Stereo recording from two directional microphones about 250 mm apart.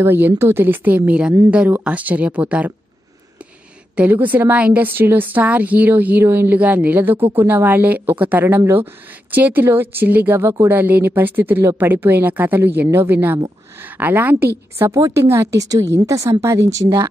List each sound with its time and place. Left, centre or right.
0.0 s a woman's voice: centre
3.9 s a woman's voice: centre